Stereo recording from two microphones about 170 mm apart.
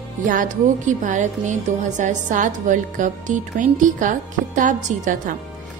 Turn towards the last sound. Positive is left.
turn(degrees=-50)  # may be behind; listen again after turning